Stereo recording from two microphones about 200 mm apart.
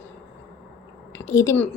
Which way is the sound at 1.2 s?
15° left (ahead or behind).